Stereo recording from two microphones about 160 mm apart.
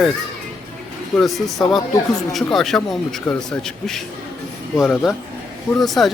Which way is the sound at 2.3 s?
Centre (ahead or behind).